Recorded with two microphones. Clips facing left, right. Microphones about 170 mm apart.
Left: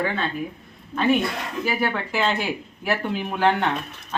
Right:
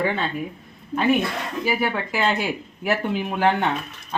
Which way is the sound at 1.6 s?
10° right (ahead or behind).